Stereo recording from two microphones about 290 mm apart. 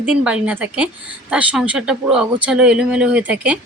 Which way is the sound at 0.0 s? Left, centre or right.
Centre.